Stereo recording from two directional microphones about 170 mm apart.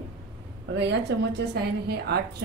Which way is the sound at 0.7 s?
85° right.